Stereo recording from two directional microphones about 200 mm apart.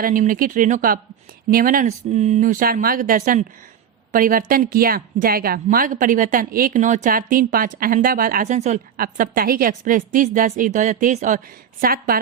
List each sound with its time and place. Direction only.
0.0 s speech: 45° right (ahead or behind)